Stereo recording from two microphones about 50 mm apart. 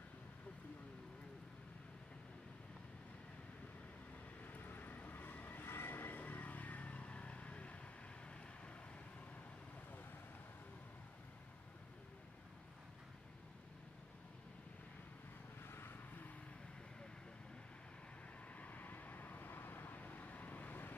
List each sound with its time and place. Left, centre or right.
4.5 s vehicle: left
5.7 s vehicle: left
15.6 s vehicle: left
18.6 s vehicle: left